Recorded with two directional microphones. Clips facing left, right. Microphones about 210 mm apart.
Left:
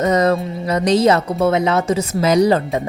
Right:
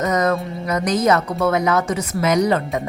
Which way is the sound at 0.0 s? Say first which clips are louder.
Left 4 dB; 30° left (ahead or behind).